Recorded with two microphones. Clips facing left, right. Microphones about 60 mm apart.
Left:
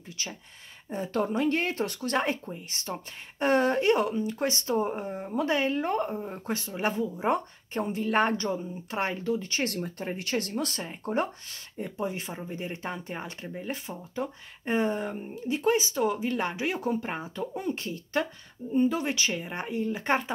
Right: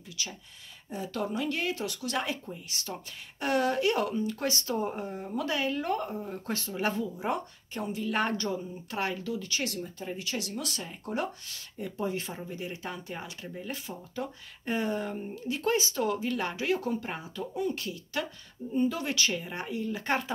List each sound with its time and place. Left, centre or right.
0.2 s speech: left
8.3 s speech: left
9.7 s speech: left